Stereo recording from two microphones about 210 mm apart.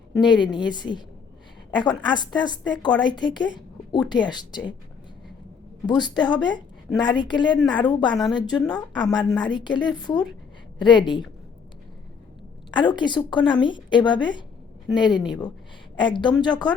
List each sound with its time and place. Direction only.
0.1 s a woman's voice: 20° left (ahead or behind)
5.8 s a woman's voice: 20° left (ahead or behind)
8.1 s speech: centre (ahead or behind)
8.4 s a woman's voice: 20° left (ahead or behind)
12.7 s a woman's voice: 20° left (ahead or behind)